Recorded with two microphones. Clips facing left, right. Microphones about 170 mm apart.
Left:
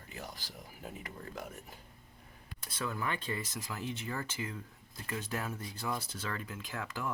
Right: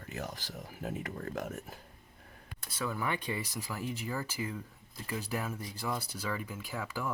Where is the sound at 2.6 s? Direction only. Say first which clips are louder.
Right 2 dB; 5° right (ahead or behind).